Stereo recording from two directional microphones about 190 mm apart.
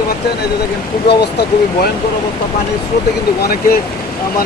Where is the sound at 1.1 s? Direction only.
60° left (ahead or behind).